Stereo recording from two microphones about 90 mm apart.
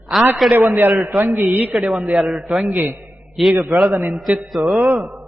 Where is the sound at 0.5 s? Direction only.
20° right (ahead or behind); by 2.7 s 5° right (ahead or behind).